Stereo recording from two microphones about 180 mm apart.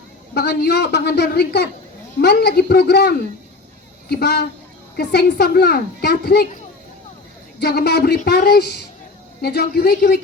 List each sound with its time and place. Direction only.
0.3 s a woman's voice: 65° left (ahead or behind)
4.1 s a woman's voice: 65° left (ahead or behind)
7.6 s a woman's voice: 60° left (ahead or behind)